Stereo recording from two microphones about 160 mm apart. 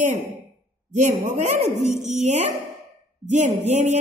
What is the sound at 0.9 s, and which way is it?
A woman's voice, 50° right (ahead or behind).